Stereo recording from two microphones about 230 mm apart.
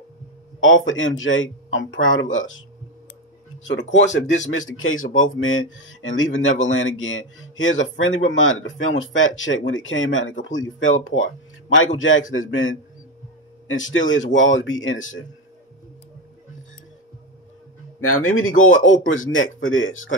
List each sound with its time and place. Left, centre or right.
0.6 s speech: left
4.1 s speech: left
13.9 s speech: left
18.0 s speech: left